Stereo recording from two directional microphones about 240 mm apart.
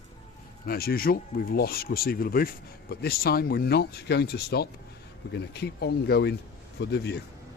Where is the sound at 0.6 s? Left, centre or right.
Left.